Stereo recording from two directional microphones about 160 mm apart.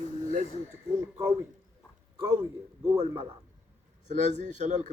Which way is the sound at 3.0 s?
35° right (ahead or behind).